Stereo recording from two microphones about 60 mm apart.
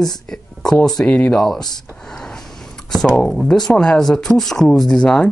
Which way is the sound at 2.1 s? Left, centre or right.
Centre.